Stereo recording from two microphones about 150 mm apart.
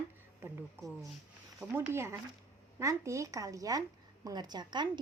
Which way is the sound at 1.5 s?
10° right (ahead or behind).